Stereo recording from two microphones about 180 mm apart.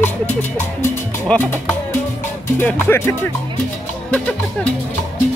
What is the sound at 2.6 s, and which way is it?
Speech, 10° left (ahead or behind).